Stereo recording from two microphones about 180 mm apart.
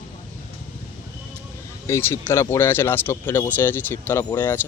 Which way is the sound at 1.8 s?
15° left (ahead or behind).